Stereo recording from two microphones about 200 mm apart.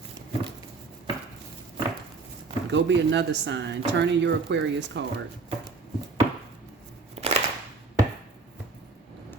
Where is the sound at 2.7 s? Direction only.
60° right (ahead or behind).